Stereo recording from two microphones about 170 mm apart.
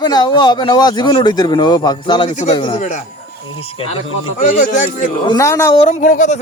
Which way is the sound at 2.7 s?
45° left (ahead or behind).